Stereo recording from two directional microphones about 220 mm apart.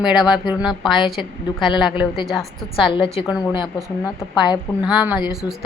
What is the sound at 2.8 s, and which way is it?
Speech, 20° left (ahead or behind).